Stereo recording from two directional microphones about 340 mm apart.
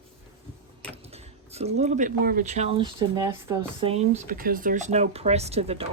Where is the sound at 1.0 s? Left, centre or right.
Centre.